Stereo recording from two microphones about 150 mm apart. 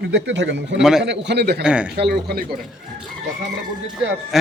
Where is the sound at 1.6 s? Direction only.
5° right (ahead or behind).